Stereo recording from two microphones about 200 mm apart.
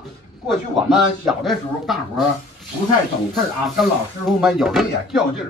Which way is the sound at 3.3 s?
Centre (ahead or behind).